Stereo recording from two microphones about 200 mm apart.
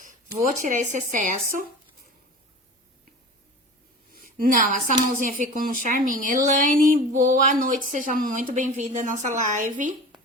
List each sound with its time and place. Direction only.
0.3 s a woman's voice: 40° right (ahead or behind)
4.1 s a woman's voice: 45° right (ahead or behind)